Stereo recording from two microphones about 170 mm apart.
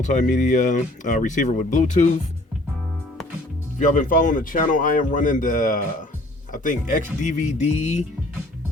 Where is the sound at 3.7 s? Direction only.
50° left (ahead or behind).